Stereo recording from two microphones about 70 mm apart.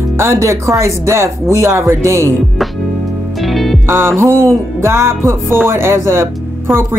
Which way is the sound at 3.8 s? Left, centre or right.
Right.